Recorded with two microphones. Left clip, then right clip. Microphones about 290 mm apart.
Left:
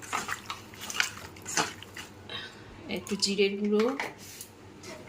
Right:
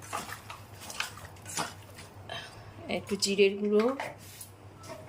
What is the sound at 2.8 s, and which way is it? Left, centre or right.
Speech, centre.